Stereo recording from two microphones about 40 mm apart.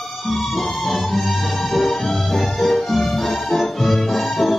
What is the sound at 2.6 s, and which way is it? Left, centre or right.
Music, centre.